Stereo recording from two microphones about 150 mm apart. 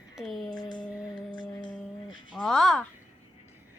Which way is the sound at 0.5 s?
30° left (ahead or behind).